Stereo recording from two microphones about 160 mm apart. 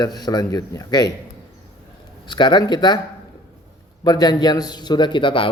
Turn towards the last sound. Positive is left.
turn(degrees=30)  # may be behind; listen again after turning